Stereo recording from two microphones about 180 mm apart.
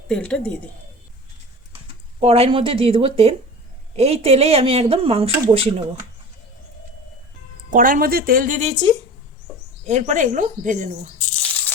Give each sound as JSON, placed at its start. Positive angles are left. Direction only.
{"t": 0.1, "sound": "speech", "side_deg": 5}
{"t": 2.2, "sound": "speech", "side_deg": -35}
{"t": 7.7, "sound": "speech", "side_deg": -50}
{"t": 11.3, "sound": "a sound", "side_deg": 10}